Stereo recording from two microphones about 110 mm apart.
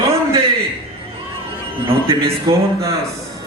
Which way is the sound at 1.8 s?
55° right (ahead or behind).